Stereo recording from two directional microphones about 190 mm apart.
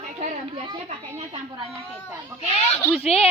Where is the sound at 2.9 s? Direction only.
30° left (ahead or behind).